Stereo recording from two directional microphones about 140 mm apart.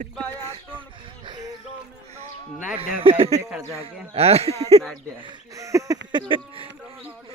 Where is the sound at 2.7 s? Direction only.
40° right (ahead or behind).